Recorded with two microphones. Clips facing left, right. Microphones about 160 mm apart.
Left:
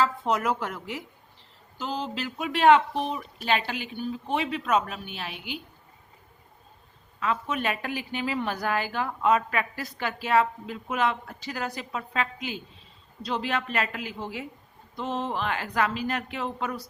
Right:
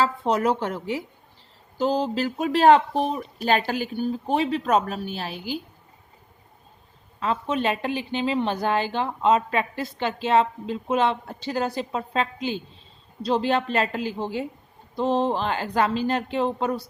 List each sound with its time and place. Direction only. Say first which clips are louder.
0.0 s speech: right 3 dB; 35° right (ahead or behind)
7.2 s a woman's voice: right 4 dB; 30° right (ahead or behind)